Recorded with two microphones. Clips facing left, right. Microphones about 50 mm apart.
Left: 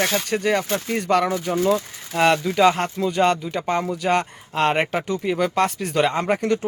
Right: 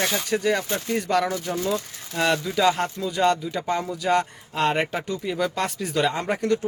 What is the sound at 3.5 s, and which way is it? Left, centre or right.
Speech, left.